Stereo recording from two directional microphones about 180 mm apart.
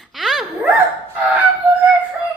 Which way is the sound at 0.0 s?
Centre (ahead or behind).